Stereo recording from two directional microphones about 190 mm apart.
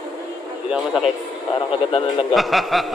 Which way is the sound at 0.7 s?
5° right (ahead or behind).